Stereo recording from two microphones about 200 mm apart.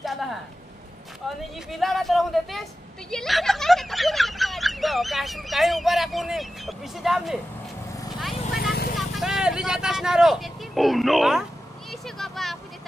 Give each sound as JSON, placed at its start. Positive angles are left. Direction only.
{"t": 0.0, "sound": "a sound", "side_deg": 0}
{"t": 1.7, "sound": "speech", "side_deg": 0}
{"t": 3.1, "sound": "a sound", "side_deg": 0}
{"t": 8.5, "sound": "vehicle", "side_deg": 50}
{"t": 8.9, "sound": "speech", "side_deg": 0}
{"t": 11.9, "sound": "vehicle", "side_deg": 0}